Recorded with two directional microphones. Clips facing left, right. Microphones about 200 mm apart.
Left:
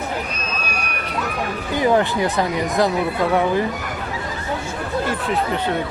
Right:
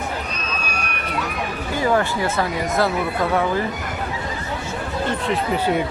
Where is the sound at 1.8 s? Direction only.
20° left (ahead or behind).